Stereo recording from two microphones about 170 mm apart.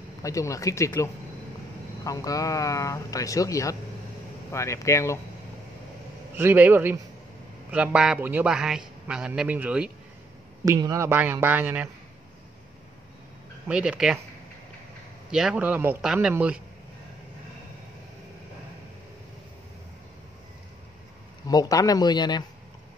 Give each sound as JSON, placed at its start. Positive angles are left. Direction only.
{"t": 0.2, "sound": "speech", "side_deg": 20}
{"t": 6.3, "sound": "a man's voice", "side_deg": -10}
{"t": 10.6, "sound": "speech", "side_deg": -20}
{"t": 13.7, "sound": "a man's voice", "side_deg": -5}
{"t": 15.3, "sound": "speech", "side_deg": -5}
{"t": 21.5, "sound": "speech", "side_deg": 20}